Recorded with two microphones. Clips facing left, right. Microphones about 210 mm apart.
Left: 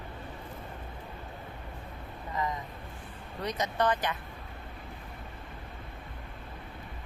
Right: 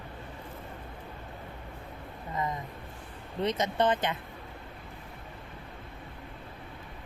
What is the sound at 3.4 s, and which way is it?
Speech, 25° right (ahead or behind).